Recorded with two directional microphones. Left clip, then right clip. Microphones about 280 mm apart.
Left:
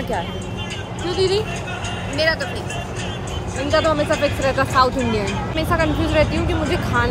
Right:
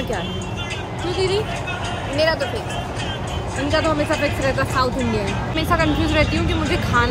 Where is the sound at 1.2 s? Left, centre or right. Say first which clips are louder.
Left 2 dB; centre.